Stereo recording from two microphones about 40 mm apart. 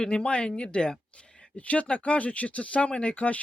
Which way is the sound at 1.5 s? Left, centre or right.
Left.